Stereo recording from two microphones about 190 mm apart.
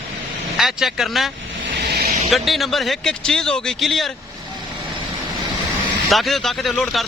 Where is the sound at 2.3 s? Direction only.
Centre (ahead or behind).